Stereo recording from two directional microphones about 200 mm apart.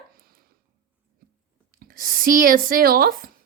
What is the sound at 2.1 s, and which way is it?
A woman's voice, 45° right (ahead or behind).